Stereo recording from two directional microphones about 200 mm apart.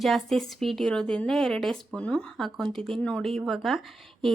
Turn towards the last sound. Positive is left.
turn(degrees=0)  # may be behind; listen again after turning